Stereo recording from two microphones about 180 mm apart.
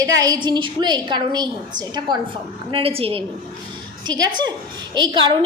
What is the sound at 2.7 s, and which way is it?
A woman's voice, 30° right (ahead or behind).